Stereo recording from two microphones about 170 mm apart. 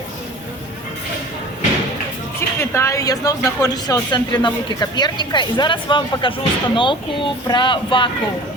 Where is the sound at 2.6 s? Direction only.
15° left (ahead or behind).